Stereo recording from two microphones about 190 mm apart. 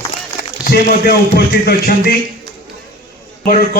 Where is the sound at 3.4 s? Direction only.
50° left (ahead or behind).